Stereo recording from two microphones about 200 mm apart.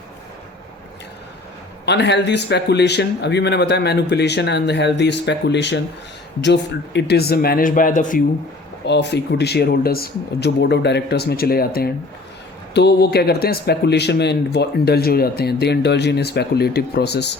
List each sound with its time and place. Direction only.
1.8 s speech: 60° left (ahead or behind); by 8.2 s 40° left (ahead or behind)
8.9 s speech: 60° left (ahead or behind)